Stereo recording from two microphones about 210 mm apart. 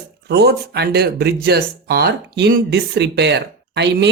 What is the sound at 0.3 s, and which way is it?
Speech, 50° right (ahead or behind).